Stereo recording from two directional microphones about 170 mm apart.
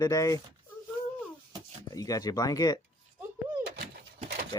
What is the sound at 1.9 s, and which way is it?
Speech, 20° left (ahead or behind).